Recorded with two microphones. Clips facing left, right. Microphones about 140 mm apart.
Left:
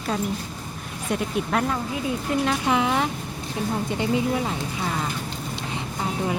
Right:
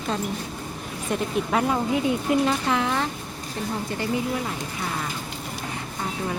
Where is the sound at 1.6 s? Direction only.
20° right (ahead or behind).